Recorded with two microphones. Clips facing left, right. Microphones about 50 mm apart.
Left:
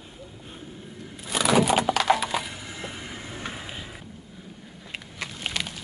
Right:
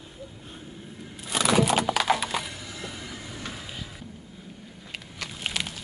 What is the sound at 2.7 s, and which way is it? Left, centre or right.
Train, left.